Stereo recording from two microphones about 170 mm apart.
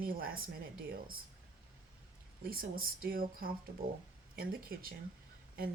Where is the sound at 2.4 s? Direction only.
60° right (ahead or behind).